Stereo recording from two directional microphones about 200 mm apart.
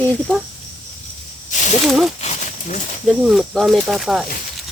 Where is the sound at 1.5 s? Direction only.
40° left (ahead or behind).